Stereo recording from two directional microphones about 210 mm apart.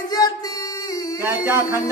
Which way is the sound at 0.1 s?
20° left (ahead or behind).